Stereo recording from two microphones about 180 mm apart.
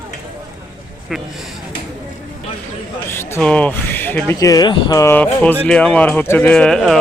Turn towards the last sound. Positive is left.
turn(degrees=0)  # may be behind; listen again after turning